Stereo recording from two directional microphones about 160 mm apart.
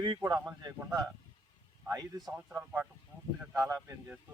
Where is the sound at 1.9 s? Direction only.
25° right (ahead or behind).